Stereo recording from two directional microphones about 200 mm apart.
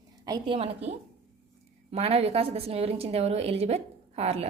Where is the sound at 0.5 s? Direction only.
30° right (ahead or behind).